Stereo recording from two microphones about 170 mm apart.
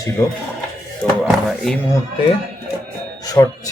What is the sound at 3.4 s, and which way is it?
Speech, 15° left (ahead or behind).